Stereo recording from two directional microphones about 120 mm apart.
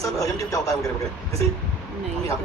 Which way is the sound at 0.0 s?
30° left (ahead or behind).